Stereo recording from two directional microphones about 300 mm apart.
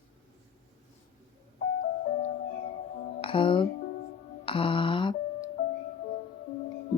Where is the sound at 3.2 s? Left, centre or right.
Centre.